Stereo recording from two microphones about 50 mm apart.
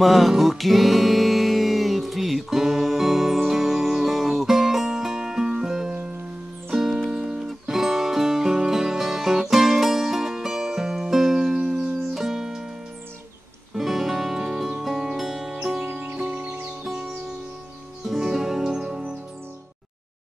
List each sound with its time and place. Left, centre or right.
0.0 s music: centre
13.7 s music: centre
15.8 s music: right
18.0 s music: centre